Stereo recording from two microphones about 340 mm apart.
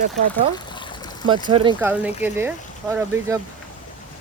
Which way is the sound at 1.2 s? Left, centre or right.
Centre.